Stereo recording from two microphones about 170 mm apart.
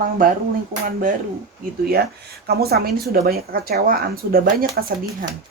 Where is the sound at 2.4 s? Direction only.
65° right (ahead or behind).